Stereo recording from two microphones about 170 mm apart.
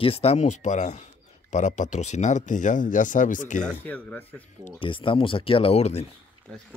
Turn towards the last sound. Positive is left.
turn(degrees=10)  # may be behind; listen again after turning